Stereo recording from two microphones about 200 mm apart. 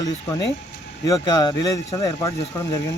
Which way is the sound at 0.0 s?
15° left (ahead or behind).